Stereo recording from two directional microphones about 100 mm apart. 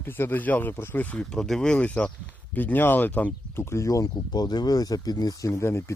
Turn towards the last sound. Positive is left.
turn(degrees=25)  # may be behind; listen again after turning